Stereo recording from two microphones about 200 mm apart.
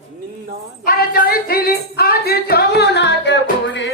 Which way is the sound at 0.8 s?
50° left (ahead or behind).